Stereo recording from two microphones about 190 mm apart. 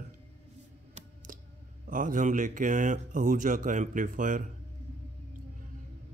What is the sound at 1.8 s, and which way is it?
Speech, 45° right (ahead or behind).